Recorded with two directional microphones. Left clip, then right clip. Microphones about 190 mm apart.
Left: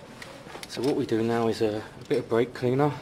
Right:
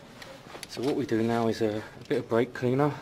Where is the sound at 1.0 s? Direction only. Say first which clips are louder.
Even; 35° right (ahead or behind).